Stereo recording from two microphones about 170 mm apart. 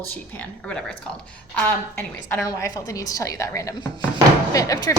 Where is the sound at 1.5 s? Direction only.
10° left (ahead or behind).